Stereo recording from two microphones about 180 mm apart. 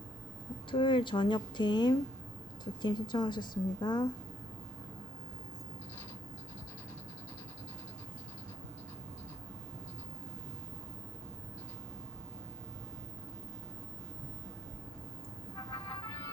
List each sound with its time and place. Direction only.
0.7 s a woman's voice: 25° left (ahead or behind)
15.5 s vehicle: 20° left (ahead or behind)